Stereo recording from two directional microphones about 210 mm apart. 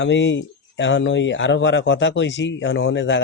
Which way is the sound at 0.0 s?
60° left (ahead or behind).